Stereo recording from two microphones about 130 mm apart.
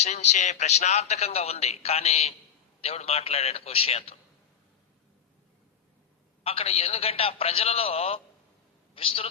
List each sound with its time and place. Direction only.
0.0 s a man's voice: 60° left (ahead or behind)
6.4 s a man's voice: 50° left (ahead or behind)